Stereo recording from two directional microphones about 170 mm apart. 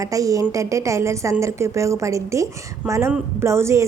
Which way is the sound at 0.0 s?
20° right (ahead or behind).